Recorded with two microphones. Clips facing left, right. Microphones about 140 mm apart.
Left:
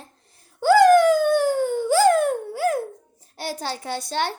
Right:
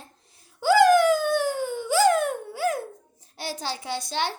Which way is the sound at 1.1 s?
50° left (ahead or behind).